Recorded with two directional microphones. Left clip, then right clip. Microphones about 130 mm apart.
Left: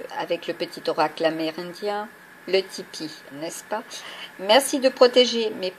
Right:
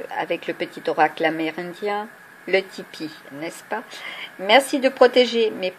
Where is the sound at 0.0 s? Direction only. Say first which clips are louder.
Right 2 dB; 40° right (ahead or behind).